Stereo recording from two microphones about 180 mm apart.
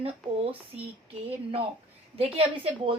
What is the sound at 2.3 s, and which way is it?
Speech, 30° right (ahead or behind).